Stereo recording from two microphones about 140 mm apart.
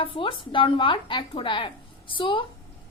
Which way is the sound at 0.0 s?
40° left (ahead or behind).